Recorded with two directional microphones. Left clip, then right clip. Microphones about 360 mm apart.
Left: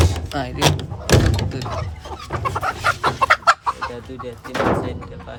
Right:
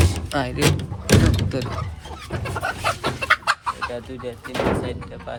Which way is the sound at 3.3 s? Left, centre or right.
Centre.